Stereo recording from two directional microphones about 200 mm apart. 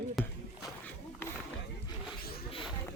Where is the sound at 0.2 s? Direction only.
Centre (ahead or behind).